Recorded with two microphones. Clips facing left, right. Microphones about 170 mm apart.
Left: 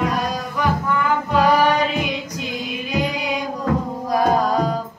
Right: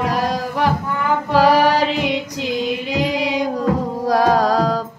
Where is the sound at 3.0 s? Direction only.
85° right.